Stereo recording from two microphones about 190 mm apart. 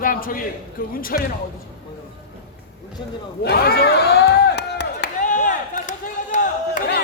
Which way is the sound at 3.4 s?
55° left (ahead or behind).